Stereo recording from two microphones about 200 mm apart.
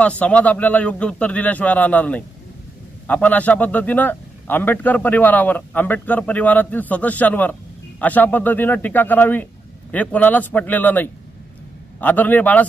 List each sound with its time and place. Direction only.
0.0 s a man's voice: 5° left (ahead or behind)